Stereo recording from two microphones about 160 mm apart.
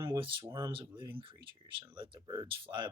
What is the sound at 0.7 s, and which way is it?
Speech, 30° right (ahead or behind).